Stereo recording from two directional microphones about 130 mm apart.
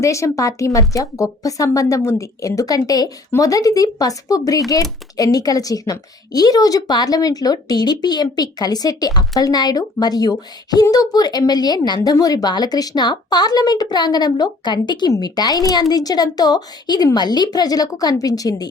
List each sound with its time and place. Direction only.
0.0 s speech: 25° left (ahead or behind)